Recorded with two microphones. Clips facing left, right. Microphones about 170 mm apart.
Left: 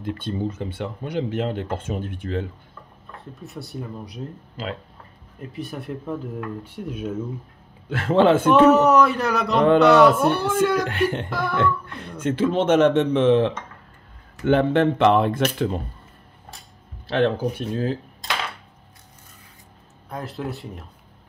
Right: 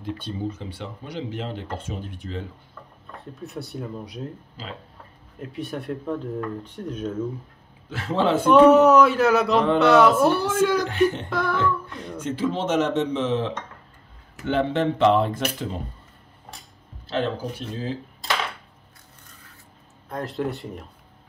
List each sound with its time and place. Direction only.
0.0 s speech: 50° left (ahead or behind)
3.3 s speech: centre (ahead or behind)
5.4 s speech: centre (ahead or behind)
7.9 s speech: 55° left (ahead or behind)
8.5 s speech: centre (ahead or behind)
10.9 s speech: 60° left (ahead or behind)
11.2 s speech: centre (ahead or behind)
11.8 s speech: 60° left (ahead or behind)
17.1 s speech: 60° left (ahead or behind)
20.1 s speech: centre (ahead or behind)